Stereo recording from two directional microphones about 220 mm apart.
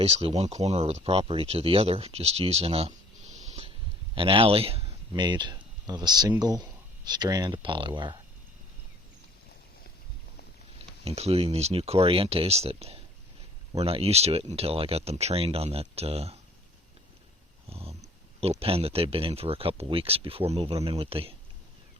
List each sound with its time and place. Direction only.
0.0 s speech: 25° right (ahead or behind)
11.0 s speech: 30° right (ahead or behind)
17.7 s speech: 25° right (ahead or behind)